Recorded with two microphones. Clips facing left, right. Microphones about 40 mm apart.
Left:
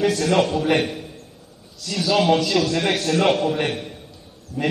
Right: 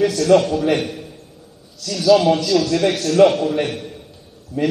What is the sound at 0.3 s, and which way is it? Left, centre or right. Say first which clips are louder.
Speech: right 6 dB; centre.